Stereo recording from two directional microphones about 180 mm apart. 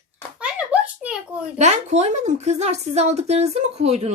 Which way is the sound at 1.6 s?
40° right (ahead or behind).